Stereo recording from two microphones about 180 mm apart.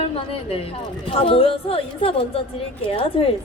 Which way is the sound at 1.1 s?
30° left (ahead or behind).